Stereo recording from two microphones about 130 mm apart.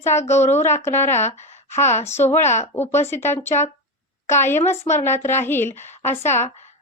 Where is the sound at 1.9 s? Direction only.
60° left (ahead or behind).